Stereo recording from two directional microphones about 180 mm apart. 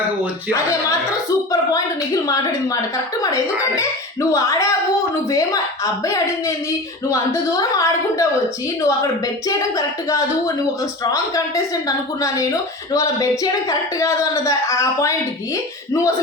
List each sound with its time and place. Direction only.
0.5 s speech: 20° left (ahead or behind)
2.2 s a woman's voice: 20° left (ahead or behind)
4.3 s a woman's voice: 20° left (ahead or behind)